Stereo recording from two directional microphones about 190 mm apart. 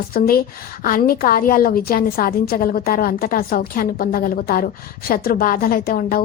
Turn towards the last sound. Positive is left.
turn(degrees=50)  # may be behind; listen again after turning